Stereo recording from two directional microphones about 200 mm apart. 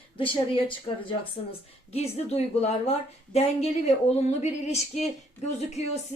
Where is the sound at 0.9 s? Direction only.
25° left (ahead or behind).